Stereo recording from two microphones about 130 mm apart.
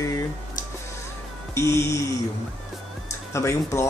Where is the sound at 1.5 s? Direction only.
20° left (ahead or behind).